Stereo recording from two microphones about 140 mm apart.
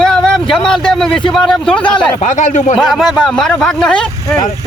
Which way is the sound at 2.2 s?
60° left (ahead or behind).